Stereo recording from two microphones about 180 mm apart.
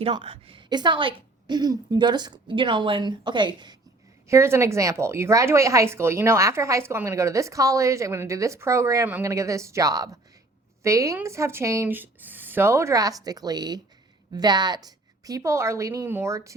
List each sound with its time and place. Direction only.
0.0 s a woman's voice: 30° right (ahead or behind)
4.3 s speech: 15° right (ahead or behind)